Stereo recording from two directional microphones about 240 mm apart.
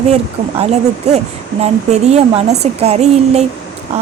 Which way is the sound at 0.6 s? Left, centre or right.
Right.